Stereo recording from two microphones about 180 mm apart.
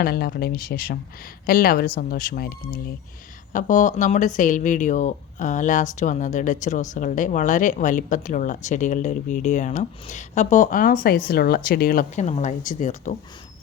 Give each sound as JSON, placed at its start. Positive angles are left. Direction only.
{"t": 0.0, "sound": "speech", "side_deg": 60}